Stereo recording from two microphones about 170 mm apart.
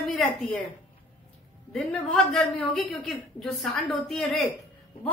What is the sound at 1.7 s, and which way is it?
A woman's voice, 5° left (ahead or behind).